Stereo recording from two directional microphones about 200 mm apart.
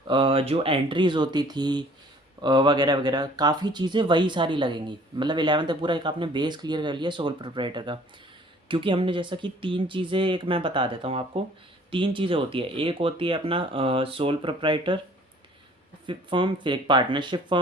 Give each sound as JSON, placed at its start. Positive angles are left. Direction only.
{"t": 0.1, "sound": "speech", "side_deg": -25}
{"t": 16.0, "sound": "speech", "side_deg": -25}